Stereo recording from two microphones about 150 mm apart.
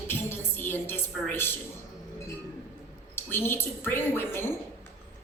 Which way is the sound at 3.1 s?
15° left (ahead or behind).